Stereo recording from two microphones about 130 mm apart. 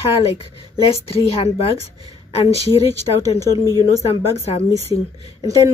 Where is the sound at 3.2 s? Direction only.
30° right (ahead or behind).